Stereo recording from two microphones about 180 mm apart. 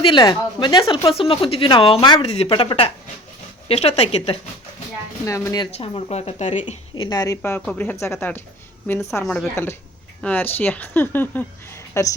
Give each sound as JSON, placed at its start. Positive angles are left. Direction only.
{"t": 0.0, "sound": "speech", "side_deg": 25}
{"t": 5.2, "sound": "speech", "side_deg": 15}
{"t": 5.7, "sound": "speech", "side_deg": 35}
{"t": 6.9, "sound": "speech", "side_deg": 25}